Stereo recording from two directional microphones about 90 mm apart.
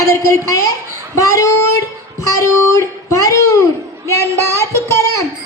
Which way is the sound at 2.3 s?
35° left (ahead or behind).